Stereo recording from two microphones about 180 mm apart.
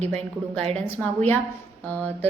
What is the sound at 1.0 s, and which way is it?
Speech, 10° left (ahead or behind).